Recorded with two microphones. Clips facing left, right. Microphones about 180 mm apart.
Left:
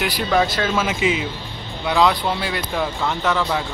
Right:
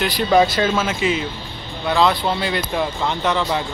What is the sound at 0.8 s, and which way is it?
Speech, 15° left (ahead or behind).